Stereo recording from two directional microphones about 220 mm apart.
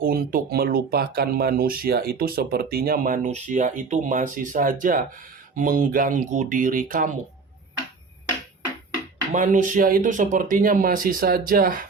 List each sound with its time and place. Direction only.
0.0 s speech: 40° right (ahead or behind)
9.3 s speech: 35° right (ahead or behind)